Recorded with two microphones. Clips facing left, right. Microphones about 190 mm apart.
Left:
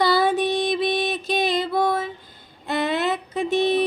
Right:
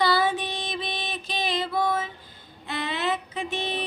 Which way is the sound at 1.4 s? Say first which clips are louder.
Left 2 dB; 40° left (ahead or behind).